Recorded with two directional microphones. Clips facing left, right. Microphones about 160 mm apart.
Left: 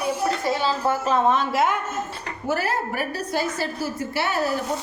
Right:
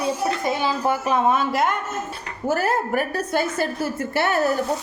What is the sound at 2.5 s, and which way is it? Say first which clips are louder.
A woman's voice: right 3 dB; 45° right (ahead or behind).